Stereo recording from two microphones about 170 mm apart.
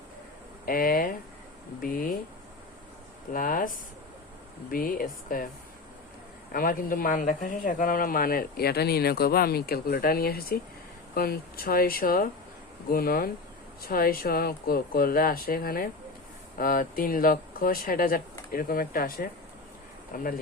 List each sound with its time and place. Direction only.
0.6 s a sound: 55° left (ahead or behind)
1.8 s speech: 55° left (ahead or behind)
3.3 s speech: 55° left (ahead or behind)
4.7 s speech: 55° left (ahead or behind)
6.5 s speech: 55° left (ahead or behind)